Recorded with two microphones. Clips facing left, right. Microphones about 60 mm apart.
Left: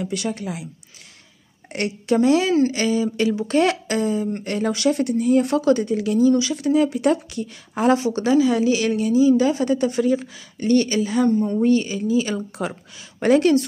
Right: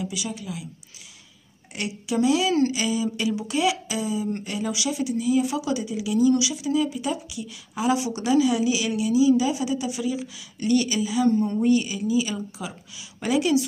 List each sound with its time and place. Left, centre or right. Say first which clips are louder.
0.1 s speech: left 6 dB; left
1.7 s a woman's voice: left 7 dB; left
6.5 s speech: left 5 dB; left
11.2 s speech: even; left
11.7 s speech: left 3 dB; left